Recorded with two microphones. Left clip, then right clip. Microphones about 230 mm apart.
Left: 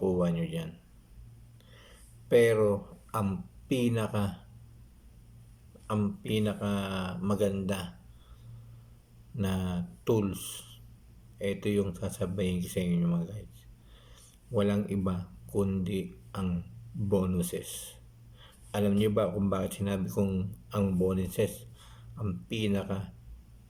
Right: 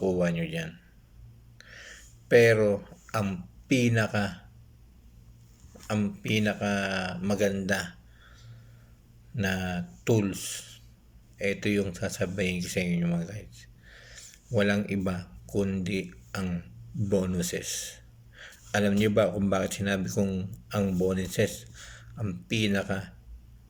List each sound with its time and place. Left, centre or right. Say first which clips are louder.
0.2 s speech: right 3 dB; centre
1.5 s gasp: right 11 dB; centre
2.3 s speech: right 3 dB; centre
5.9 s speech: right 3 dB; centre
9.3 s speech: right 5 dB; centre
10.2 s speech: right 2 dB; centre
11.3 s speech: right 3 dB; centre